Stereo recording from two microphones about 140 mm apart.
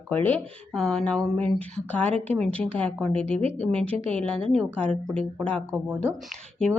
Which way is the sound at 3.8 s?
40° right (ahead or behind).